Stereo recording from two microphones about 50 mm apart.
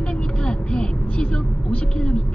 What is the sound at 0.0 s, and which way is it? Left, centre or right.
Vehicle, left.